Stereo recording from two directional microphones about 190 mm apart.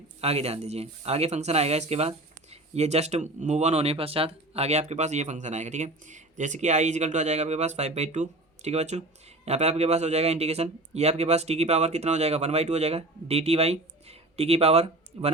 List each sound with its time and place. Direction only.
0.2 s speech: 35° right (ahead or behind)